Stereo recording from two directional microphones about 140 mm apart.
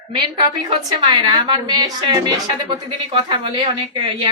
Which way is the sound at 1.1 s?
30° right (ahead or behind).